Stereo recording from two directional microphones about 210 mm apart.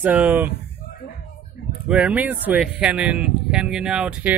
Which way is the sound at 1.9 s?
5° right (ahead or behind).